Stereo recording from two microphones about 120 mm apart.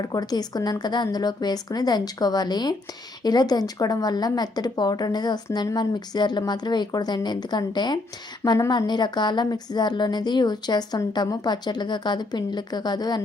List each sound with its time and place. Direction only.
0.0 s speech: 30° left (ahead or behind)
8.4 s a woman's voice: 25° left (ahead or behind)
8.7 s speech: 35° left (ahead or behind)